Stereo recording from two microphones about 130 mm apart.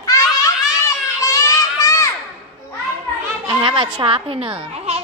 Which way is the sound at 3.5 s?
35° right (ahead or behind).